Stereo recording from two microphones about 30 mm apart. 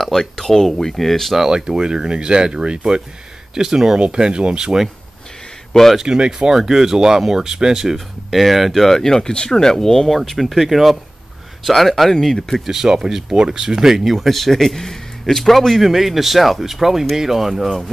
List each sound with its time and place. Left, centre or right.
0.0 s speech: centre
1.5 s speech: right
3.5 s speech: right
4.0 s speech: right
5.7 s speech: centre
6.0 s speech: right
6.5 s speech: centre
7.8 s speech: centre
8.7 s speech: centre
10.0 s speech: centre
12.6 s speech: centre
14.0 s speech: centre
15.8 s speech: centre